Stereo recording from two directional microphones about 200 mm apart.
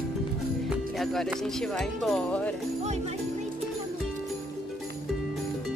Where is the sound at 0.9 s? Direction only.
Centre (ahead or behind).